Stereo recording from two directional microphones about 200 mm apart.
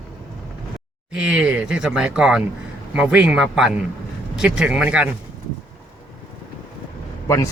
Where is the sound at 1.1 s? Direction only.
5° right (ahead or behind).